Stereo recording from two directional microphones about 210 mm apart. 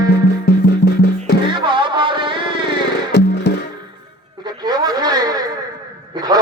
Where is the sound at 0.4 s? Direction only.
50° left (ahead or behind).